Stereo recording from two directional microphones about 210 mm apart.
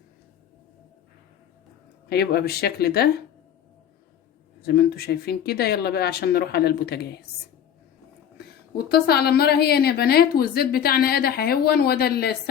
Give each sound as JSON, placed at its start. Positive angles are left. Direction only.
{"t": 2.0, "sound": "a woman's voice", "side_deg": 50}
{"t": 4.6, "sound": "a woman's voice", "side_deg": 50}
{"t": 8.7, "sound": "a woman's voice", "side_deg": 50}